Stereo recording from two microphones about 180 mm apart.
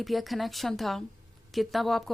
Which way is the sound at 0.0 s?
Centre (ahead or behind).